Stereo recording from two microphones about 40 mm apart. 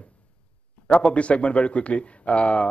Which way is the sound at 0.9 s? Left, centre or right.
Left.